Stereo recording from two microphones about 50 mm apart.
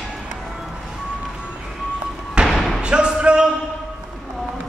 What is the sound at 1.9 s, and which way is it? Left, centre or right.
Basketball bounce, centre.